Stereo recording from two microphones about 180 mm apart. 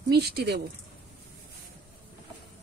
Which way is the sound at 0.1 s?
60° right (ahead or behind).